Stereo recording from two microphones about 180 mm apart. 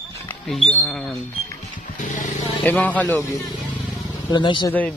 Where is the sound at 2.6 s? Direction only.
10° left (ahead or behind).